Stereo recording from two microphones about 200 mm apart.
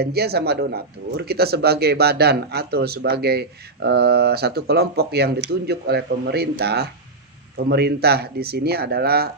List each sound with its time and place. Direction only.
0.0 s speech: 55° right (ahead or behind)